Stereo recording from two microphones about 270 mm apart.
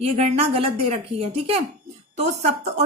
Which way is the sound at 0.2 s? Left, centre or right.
Right.